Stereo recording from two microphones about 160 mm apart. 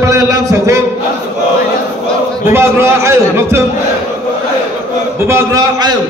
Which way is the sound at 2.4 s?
15° right (ahead or behind).